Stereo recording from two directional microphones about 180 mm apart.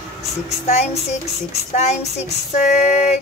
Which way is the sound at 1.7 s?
40° left (ahead or behind).